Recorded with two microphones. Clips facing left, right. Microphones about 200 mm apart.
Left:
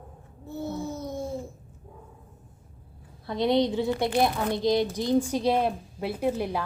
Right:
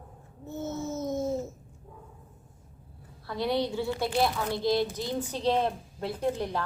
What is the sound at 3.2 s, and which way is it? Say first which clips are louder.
A woman's voice: left 5 dB; 20° left (ahead or behind).